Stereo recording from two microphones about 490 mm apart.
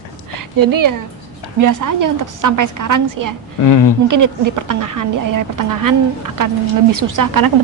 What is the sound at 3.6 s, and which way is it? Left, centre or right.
Speech, left.